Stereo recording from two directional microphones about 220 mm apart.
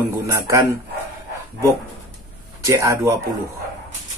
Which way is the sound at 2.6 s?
15° right (ahead or behind).